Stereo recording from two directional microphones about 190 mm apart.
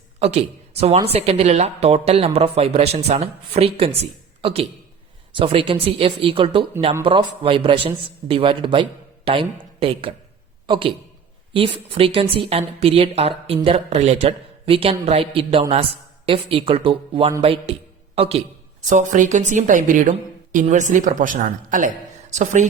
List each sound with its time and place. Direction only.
0.2 s a man's voice: 35° right (ahead or behind)